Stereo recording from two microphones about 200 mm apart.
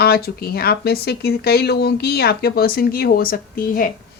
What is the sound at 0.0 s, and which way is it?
A woman's voice, 50° left (ahead or behind).